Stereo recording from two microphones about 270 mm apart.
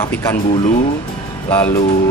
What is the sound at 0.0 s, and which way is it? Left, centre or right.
Speech, centre.